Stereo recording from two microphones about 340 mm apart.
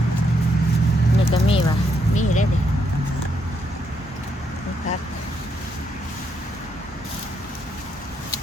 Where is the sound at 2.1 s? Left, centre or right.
Left.